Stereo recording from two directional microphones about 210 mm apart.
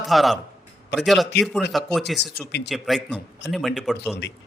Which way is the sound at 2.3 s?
55° left (ahead or behind).